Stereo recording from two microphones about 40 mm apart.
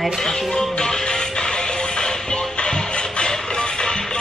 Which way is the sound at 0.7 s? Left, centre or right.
Centre.